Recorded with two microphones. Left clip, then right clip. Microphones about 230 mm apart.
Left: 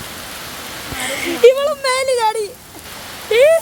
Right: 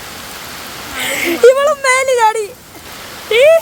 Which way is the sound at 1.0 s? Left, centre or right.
Centre.